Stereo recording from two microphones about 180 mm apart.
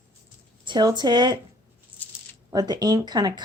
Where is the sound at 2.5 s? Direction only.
20° right (ahead or behind).